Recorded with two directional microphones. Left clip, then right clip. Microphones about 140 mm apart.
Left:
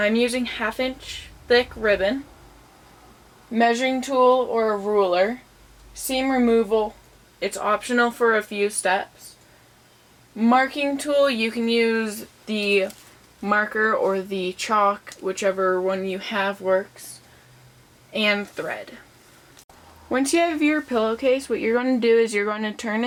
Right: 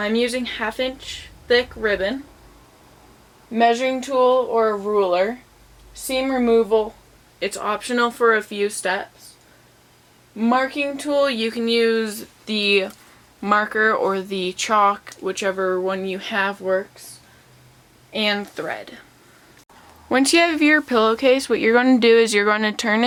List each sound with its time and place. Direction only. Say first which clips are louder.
0.2 s speech: right 1 dB; 35° right (ahead or behind)
3.8 s speech: right 1 dB; 30° right (ahead or behind)
10.3 s speech: even; 35° right (ahead or behind)
18.1 s speech: even; 35° right (ahead or behind)
20.1 s speech: right 4 dB; 35° right (ahead or behind)